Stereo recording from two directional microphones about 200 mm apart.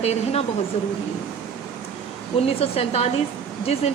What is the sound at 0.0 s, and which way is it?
Speech, 30° left (ahead or behind).